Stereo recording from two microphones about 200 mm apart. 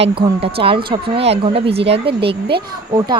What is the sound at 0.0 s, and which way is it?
Speech, 30° right (ahead or behind).